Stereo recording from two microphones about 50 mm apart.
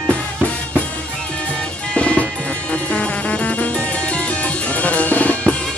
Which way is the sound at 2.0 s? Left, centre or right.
Left.